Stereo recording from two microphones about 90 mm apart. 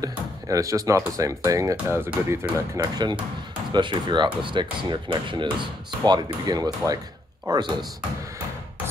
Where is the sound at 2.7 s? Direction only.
50° right (ahead or behind).